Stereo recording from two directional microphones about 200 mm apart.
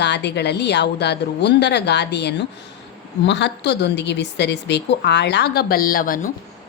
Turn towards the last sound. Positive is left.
turn(degrees=45)  # may be behind; listen again after turning